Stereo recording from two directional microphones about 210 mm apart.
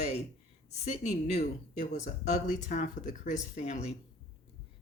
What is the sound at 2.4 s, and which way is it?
Speech, 35° left (ahead or behind).